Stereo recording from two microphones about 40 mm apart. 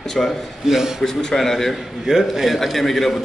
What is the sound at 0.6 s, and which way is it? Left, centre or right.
Speech, centre.